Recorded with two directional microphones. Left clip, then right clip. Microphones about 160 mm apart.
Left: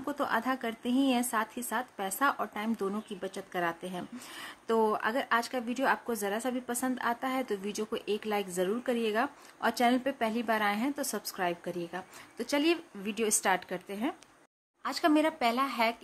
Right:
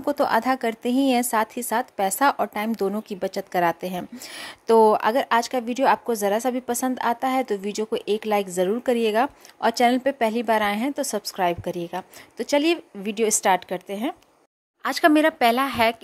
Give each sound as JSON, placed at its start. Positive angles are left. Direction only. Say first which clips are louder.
{"t": 0.0, "sound": "a woman's voice", "louder": "right 10 dB", "side_deg": -40}